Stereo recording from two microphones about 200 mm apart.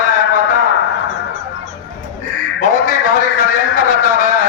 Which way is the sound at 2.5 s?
40° left (ahead or behind).